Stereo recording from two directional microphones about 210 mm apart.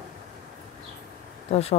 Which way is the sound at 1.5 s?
30° left (ahead or behind).